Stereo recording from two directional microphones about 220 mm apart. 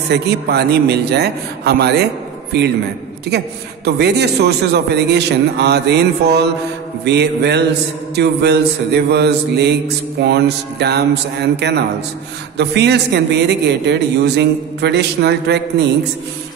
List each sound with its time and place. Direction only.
0.1 s mantra: 50° right (ahead or behind)